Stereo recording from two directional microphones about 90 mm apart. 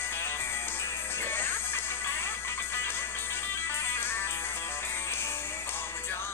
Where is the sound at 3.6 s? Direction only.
25° left (ahead or behind).